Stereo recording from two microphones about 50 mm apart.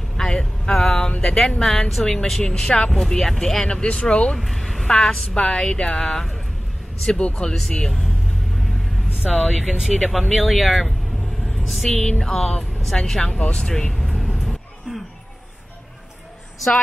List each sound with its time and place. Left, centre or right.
0.3 s a sound: centre
1.2 s a woman's voice: centre
4.4 s a sound: centre
4.8 s a woman's voice: centre
7.5 s a woman's voice: centre
8.5 s vehicle: centre
9.5 s speech: centre
11.5 s a sound: centre
11.9 s a woman's voice: centre
13.9 s vehicle: centre